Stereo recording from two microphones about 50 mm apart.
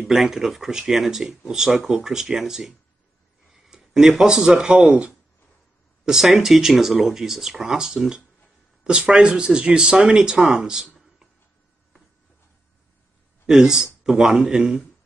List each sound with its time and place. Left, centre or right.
0.0 s speech: centre; by 5.1 s right
6.0 s speech: centre
13.5 s speech: centre